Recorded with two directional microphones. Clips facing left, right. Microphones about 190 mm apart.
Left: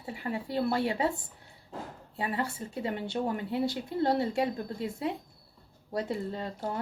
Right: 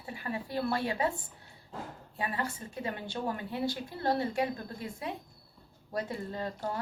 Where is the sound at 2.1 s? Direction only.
25° left (ahead or behind).